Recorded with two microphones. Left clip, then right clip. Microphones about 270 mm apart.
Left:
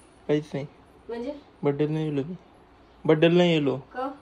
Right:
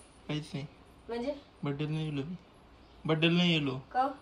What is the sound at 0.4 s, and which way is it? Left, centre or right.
Speech, centre.